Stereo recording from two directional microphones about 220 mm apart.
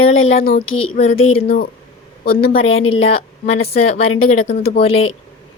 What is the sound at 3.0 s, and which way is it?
A woman's voice, 25° left (ahead or behind).